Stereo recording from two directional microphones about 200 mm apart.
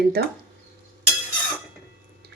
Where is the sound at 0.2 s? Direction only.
55° right (ahead or behind).